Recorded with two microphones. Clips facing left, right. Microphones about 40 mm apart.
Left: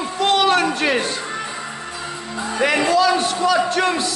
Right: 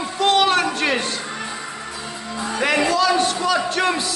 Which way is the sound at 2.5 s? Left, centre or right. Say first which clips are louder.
Left 2 dB; centre.